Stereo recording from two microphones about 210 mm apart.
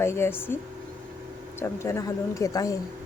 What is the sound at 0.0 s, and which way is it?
Speech, 10° left (ahead or behind).